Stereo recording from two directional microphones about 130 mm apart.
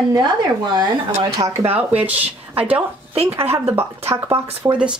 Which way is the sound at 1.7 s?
10° right (ahead or behind).